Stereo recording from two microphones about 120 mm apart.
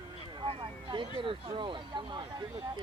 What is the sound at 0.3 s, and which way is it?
Speech, 45° right (ahead or behind).